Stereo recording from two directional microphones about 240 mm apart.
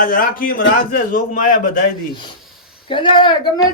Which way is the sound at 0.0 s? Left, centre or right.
Left.